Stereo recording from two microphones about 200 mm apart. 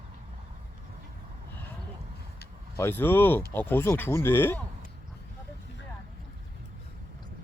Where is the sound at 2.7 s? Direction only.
10° left (ahead or behind).